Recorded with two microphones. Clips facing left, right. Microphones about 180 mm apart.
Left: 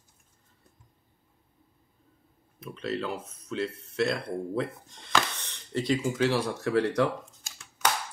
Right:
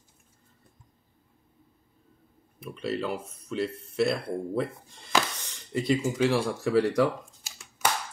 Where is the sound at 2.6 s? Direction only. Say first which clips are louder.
Right 1 dB; 10° right (ahead or behind).